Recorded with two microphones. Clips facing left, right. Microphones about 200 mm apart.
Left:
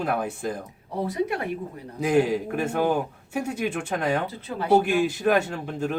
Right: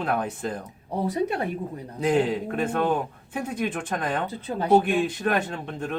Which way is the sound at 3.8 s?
70° left (ahead or behind).